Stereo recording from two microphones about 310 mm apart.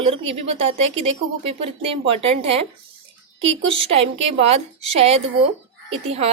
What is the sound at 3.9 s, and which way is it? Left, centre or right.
Speech, centre.